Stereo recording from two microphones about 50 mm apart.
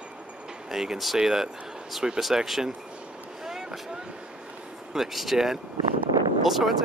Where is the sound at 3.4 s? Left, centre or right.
Centre.